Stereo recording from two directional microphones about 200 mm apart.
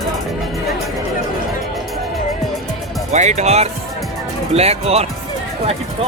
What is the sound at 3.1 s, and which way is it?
Speech, 35° right (ahead or behind).